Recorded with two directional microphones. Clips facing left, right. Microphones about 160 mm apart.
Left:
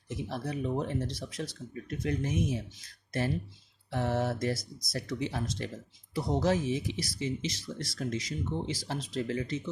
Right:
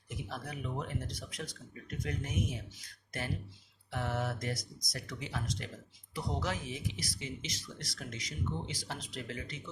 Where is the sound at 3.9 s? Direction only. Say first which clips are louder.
Left 6 dB; 30° left (ahead or behind).